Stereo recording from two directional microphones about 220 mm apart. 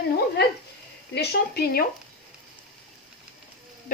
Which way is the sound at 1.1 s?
50° left (ahead or behind).